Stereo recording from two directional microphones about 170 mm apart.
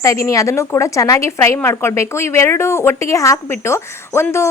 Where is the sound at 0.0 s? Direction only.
20° left (ahead or behind).